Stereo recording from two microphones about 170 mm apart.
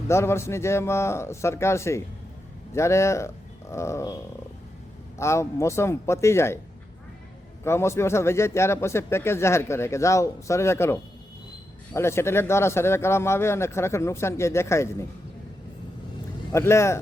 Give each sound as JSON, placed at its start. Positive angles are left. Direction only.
{"t": 0.1, "sound": "speech", "side_deg": 15}
{"t": 7.6, "sound": "speech", "side_deg": 15}
{"t": 16.5, "sound": "speech", "side_deg": 15}